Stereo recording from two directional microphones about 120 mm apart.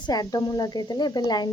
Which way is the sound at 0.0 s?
35° left (ahead or behind).